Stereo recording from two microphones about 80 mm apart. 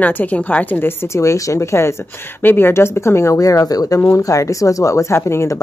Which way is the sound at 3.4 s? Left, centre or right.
Left.